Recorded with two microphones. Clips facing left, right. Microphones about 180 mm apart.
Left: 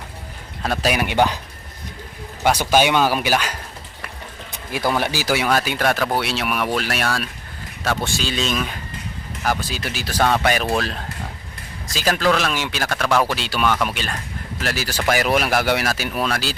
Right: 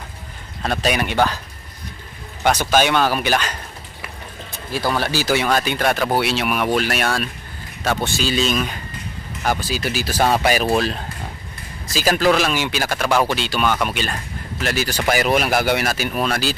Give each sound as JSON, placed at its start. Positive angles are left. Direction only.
{"t": 0.6, "sound": "speech", "side_deg": 5}
{"t": 2.4, "sound": "speech", "side_deg": 10}
{"t": 4.7, "sound": "speech", "side_deg": 20}